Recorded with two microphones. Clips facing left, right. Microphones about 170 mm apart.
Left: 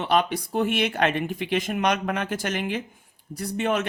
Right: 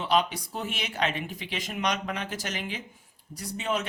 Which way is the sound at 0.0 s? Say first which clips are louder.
Left 3 dB; 60° left (ahead or behind).